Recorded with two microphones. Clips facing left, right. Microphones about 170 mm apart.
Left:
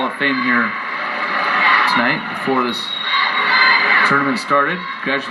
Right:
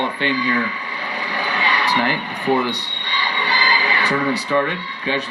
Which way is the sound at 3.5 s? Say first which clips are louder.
Left 1 dB; 30° right (ahead or behind).